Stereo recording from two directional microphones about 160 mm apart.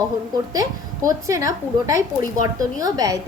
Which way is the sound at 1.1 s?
20° right (ahead or behind).